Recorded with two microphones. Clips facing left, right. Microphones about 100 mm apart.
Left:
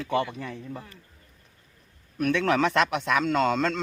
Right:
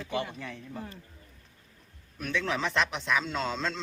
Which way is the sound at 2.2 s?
60° left (ahead or behind).